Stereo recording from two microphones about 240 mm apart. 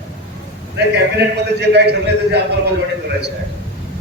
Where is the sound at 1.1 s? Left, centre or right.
Right.